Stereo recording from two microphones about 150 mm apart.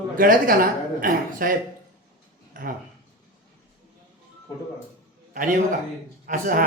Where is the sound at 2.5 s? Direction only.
65° right (ahead or behind).